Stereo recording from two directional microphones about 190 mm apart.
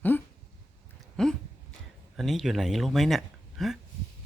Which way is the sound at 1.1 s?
5° left (ahead or behind).